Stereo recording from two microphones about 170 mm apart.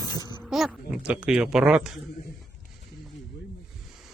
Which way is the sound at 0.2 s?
25° left (ahead or behind).